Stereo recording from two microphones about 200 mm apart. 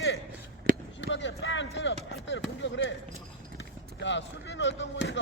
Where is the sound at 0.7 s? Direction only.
45° right (ahead or behind).